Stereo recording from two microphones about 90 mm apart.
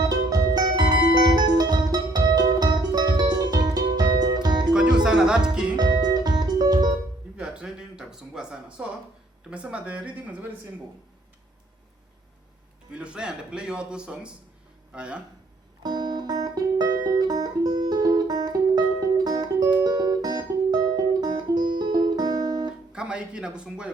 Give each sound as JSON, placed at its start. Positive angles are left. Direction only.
{"t": 0.0, "sound": "music", "side_deg": -50}
{"t": 4.7, "sound": "music", "side_deg": -10}
{"t": 5.7, "sound": "music", "side_deg": -45}
{"t": 7.3, "sound": "a sound", "side_deg": -10}
{"t": 9.5, "sound": "a man's voice", "side_deg": -10}
{"t": 12.9, "sound": "a man's voice", "side_deg": -10}
{"t": 15.8, "sound": "music", "side_deg": -50}
{"t": 22.9, "sound": "speech", "side_deg": -10}